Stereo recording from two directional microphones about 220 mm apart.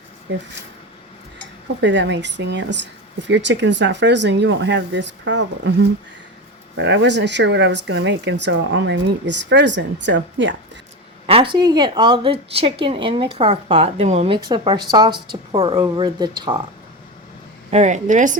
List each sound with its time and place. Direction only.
1.8 s speech: 55° right (ahead or behind)
6.7 s speech: 55° right (ahead or behind)
11.3 s a woman's voice: 25° right (ahead or behind)
17.7 s a woman's voice: 30° right (ahead or behind)